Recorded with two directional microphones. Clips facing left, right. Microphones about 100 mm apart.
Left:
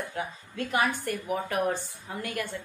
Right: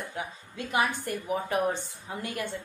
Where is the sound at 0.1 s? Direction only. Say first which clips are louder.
Left 2 dB; 15° right (ahead or behind).